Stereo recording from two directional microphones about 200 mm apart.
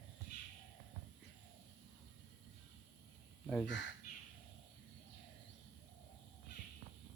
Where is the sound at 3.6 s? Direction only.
65° left (ahead or behind).